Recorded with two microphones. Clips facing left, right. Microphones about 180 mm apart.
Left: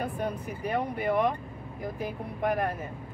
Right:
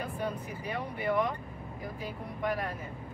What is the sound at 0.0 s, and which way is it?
Speech, 55° left (ahead or behind).